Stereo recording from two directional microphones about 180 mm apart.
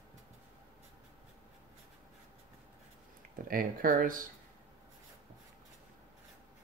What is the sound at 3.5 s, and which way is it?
Speech, 50° right (ahead or behind).